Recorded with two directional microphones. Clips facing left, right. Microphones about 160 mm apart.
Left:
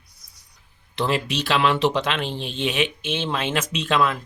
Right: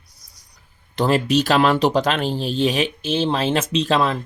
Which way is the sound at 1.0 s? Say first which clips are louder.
Right 6 dB; 40° right (ahead or behind).